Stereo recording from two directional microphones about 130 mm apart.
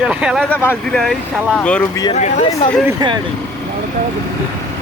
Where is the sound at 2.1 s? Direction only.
60° left (ahead or behind).